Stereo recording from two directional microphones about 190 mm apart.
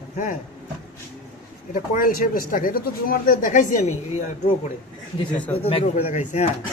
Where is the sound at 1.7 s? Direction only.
45° left (ahead or behind).